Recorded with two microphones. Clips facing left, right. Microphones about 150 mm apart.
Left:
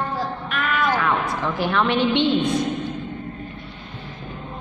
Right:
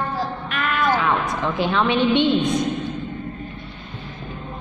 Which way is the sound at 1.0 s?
15° right (ahead or behind).